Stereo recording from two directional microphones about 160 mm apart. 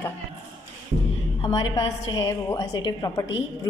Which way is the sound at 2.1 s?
20° left (ahead or behind).